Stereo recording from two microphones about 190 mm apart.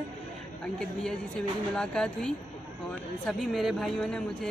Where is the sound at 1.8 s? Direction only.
5° left (ahead or behind).